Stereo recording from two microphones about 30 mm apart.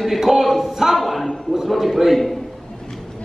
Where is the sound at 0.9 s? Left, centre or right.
Centre.